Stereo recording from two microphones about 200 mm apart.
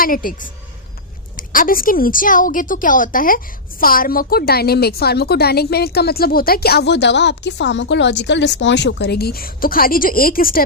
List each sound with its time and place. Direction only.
0.0 s a woman's voice: 45° left (ahead or behind)